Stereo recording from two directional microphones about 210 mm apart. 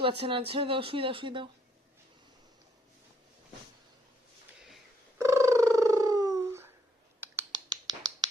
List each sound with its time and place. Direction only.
0.0 s speech: 25° right (ahead or behind)
5.1 s cat: 15° right (ahead or behind)
7.2 s a sound: 15° right (ahead or behind)